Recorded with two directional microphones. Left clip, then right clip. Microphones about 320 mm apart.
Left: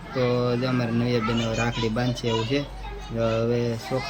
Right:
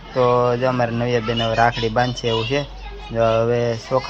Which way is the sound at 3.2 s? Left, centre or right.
Right.